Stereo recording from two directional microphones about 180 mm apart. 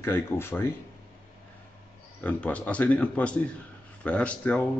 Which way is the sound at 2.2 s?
10° left (ahead or behind).